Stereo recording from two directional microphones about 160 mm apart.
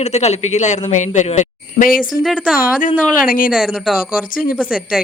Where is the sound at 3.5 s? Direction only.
5° right (ahead or behind).